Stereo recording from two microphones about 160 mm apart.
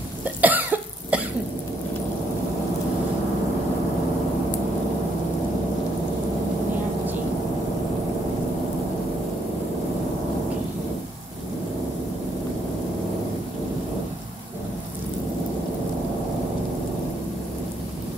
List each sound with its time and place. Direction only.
0.2 s cough: 10° right (ahead or behind)